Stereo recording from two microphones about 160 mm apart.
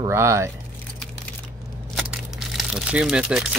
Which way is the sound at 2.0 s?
Centre (ahead or behind).